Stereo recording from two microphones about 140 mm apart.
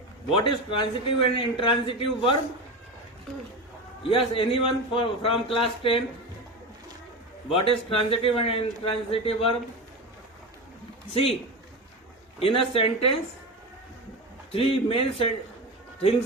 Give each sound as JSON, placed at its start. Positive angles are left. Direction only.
{"t": 0.3, "sound": "a man's voice", "side_deg": 40}
{"t": 4.1, "sound": "a man's voice", "side_deg": 40}
{"t": 7.5, "sound": "speech", "side_deg": 40}
{"t": 11.1, "sound": "speech", "side_deg": 45}
{"t": 12.4, "sound": "speech", "side_deg": 40}
{"t": 14.5, "sound": "a man's voice", "side_deg": 40}